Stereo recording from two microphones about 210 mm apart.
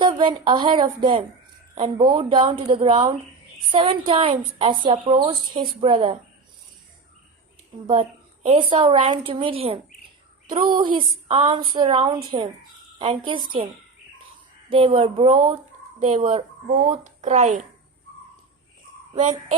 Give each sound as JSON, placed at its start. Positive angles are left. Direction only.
{"t": 0.0, "sound": "a woman's voice", "side_deg": -25}
{"t": 8.4, "sound": "a woman's voice", "side_deg": -25}
{"t": 14.7, "sound": "a woman's voice", "side_deg": -25}
{"t": 19.2, "sound": "speech", "side_deg": -35}